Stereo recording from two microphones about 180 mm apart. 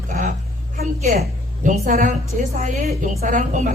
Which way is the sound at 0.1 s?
50° right (ahead or behind).